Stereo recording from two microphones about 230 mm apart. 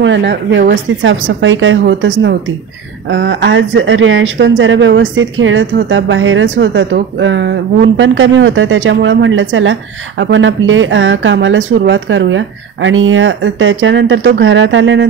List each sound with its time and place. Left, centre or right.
0.0 s a woman's voice: right